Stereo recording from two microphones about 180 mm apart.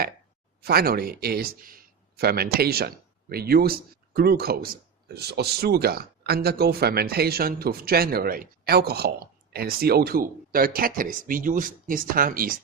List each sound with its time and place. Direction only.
0.6 s speech: 60° right (ahead or behind)